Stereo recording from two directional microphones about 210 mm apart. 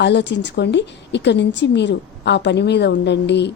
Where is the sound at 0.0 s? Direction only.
55° left (ahead or behind).